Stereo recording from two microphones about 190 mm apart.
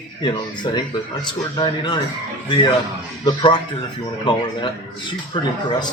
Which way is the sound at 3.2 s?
25° left (ahead or behind).